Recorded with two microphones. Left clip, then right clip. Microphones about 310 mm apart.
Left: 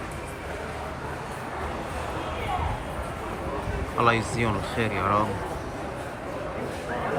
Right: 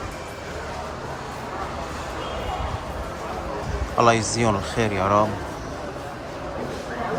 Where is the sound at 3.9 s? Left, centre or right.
Centre.